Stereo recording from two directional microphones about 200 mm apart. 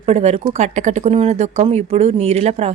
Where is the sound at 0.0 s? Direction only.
30° right (ahead or behind).